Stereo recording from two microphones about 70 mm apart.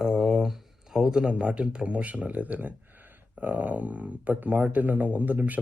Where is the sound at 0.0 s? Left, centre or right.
Centre.